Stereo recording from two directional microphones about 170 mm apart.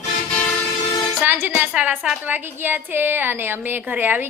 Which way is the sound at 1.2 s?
10° right (ahead or behind).